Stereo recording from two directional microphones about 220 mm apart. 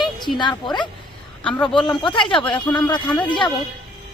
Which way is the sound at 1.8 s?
20° left (ahead or behind).